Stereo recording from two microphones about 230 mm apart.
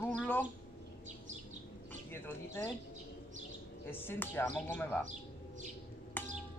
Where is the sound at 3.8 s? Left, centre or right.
Centre.